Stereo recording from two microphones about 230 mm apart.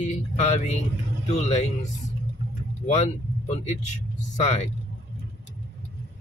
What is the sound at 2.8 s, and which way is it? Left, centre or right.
Speech, left.